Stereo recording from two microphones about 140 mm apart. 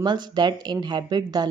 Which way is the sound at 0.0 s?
30° right (ahead or behind).